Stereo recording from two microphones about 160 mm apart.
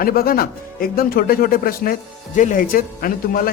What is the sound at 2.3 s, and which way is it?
A man's voice, 55° left (ahead or behind).